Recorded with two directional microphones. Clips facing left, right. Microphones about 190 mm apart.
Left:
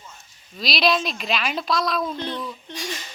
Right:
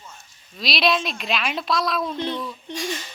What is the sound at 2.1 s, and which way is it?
Speech, 20° right (ahead or behind).